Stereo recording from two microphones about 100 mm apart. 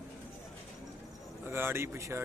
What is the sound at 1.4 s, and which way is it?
Speech, 25° right (ahead or behind).